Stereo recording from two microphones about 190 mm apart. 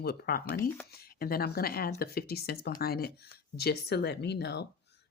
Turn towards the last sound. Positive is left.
turn(degrees=60)  # may be behind; listen again after turning